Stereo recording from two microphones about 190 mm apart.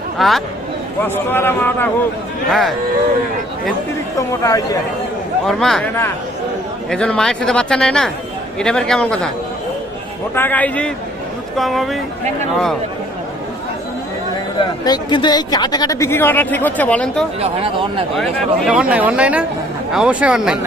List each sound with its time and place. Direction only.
0.2 s speech: centre (ahead or behind)
1.0 s speech: 10° left (ahead or behind)
2.5 s speech: centre (ahead or behind)
4.4 s speech: 20° left (ahead or behind)
5.5 s speech: centre (ahead or behind)
6.9 s speech: 5° left (ahead or behind)
10.3 s speech: 10° left (ahead or behind)
14.6 s speech: 25° left (ahead or behind); by 17.2 s 5° left (ahead or behind)
17.4 s speech: 30° right (ahead or behind)
18.2 s speech: 5° right (ahead or behind)